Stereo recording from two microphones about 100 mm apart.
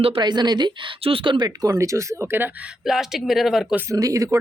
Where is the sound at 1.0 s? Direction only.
60° right (ahead or behind).